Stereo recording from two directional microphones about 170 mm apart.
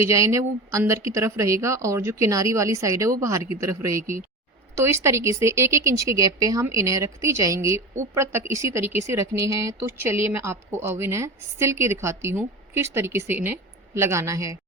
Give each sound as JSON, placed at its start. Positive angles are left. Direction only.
{"t": 0.0, "sound": "speech", "side_deg": -15}